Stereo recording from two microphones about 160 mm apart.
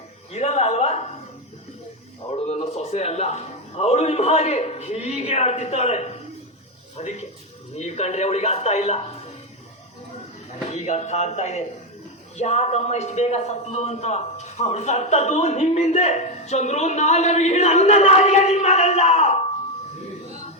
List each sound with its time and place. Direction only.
0.3 s a man's voice: 45° left (ahead or behind)
2.3 s a man's voice: 45° left (ahead or behind)
10.5 s a man's voice: 45° left (ahead or behind)